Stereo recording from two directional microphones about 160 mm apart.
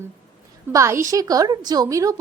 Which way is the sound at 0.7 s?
20° right (ahead or behind).